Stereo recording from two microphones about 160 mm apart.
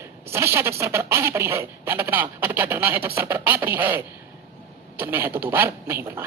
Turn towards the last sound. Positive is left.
turn(degrees=-15)  # may be behind; listen again after turning